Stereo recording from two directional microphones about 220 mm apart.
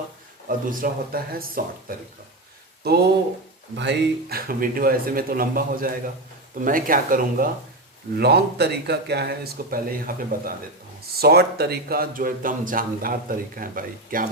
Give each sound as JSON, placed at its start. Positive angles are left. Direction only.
{"t": 0.4, "sound": "speech", "side_deg": -40}
{"t": 3.8, "sound": "speech", "side_deg": -50}